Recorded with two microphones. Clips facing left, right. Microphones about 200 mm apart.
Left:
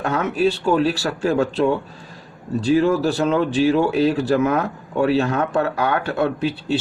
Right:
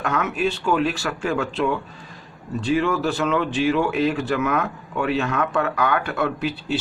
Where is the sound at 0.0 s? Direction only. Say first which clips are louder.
Left 4 dB; 30° left (ahead or behind).